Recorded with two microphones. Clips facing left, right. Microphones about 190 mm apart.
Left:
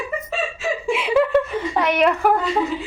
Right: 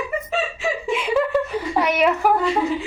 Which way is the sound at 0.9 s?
5° left (ahead or behind).